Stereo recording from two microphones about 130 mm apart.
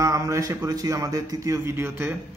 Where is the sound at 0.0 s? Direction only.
25° right (ahead or behind).